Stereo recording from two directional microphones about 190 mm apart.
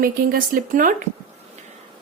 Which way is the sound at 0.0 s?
50° right (ahead or behind).